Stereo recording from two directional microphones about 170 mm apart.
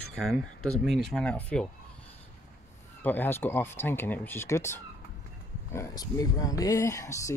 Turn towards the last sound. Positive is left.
turn(degrees=20)  # may be behind; listen again after turning